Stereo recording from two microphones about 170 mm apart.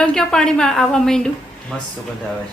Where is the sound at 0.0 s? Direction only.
5° left (ahead or behind).